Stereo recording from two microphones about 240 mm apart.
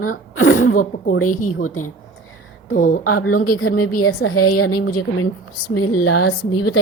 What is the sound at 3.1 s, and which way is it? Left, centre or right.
A woman's voice, left.